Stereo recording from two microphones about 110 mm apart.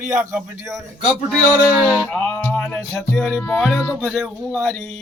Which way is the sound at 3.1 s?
5° left (ahead or behind).